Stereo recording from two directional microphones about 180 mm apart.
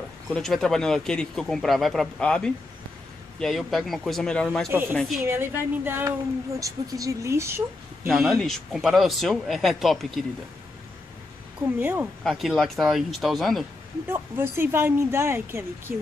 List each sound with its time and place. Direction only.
0.3 s speech: centre (ahead or behind)
4.6 s speech: 10° right (ahead or behind)
4.9 s speech: centre (ahead or behind)
5.2 s speech: 15° right (ahead or behind)
8.1 s speech: centre (ahead or behind)
11.8 s speech: 10° right (ahead or behind)
12.2 s speech: centre (ahead or behind)
14.0 s speech: 10° right (ahead or behind)